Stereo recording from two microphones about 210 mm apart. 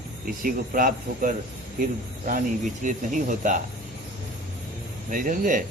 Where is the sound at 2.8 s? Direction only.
35° right (ahead or behind).